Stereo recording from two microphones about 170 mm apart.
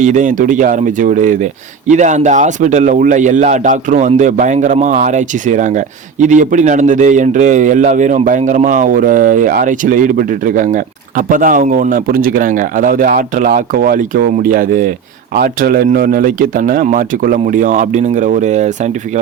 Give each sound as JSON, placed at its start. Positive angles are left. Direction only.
{"t": 0.0, "sound": "a man's voice", "side_deg": -50}